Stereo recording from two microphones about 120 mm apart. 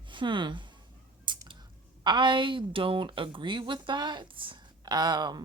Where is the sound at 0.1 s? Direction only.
40° right (ahead or behind).